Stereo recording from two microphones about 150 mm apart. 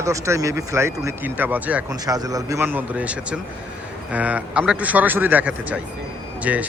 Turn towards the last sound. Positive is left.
turn(degrees=-10)  # may be behind; listen again after turning